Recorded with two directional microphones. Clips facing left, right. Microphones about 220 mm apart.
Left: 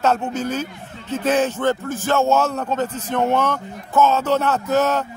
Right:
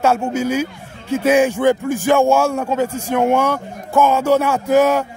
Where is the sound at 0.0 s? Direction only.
10° right (ahead or behind).